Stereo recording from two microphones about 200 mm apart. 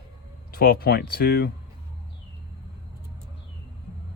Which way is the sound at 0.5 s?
50° left (ahead or behind).